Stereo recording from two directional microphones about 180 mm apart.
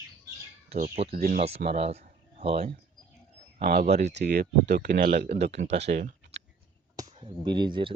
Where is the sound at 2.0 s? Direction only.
35° right (ahead or behind).